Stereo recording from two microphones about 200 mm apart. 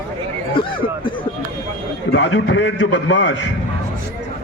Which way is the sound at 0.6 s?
25° left (ahead or behind).